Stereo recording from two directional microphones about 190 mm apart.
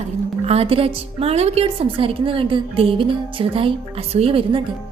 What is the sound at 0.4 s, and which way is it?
A woman's voice, 30° right (ahead or behind).